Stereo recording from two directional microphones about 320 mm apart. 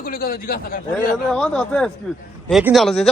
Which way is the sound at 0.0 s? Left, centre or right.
Left.